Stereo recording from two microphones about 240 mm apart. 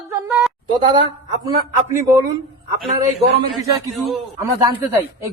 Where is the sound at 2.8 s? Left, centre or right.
Right.